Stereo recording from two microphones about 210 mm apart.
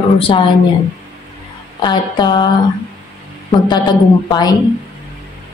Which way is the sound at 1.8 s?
20° left (ahead or behind).